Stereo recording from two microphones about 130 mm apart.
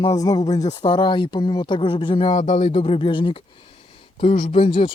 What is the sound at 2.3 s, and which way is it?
Speech, 65° left (ahead or behind).